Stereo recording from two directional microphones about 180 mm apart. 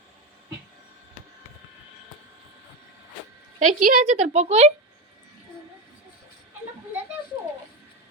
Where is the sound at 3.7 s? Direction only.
45° right (ahead or behind).